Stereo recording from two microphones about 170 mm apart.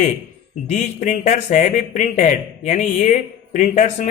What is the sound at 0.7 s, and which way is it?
A man's voice, 45° left (ahead or behind).